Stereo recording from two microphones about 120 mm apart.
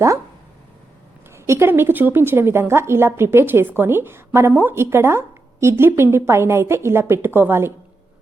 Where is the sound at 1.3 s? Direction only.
25° right (ahead or behind).